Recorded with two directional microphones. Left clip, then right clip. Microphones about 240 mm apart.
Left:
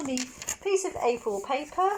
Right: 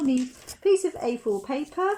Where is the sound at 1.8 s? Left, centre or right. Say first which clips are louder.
Even; right.